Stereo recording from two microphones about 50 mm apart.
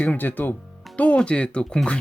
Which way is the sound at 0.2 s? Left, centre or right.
Left.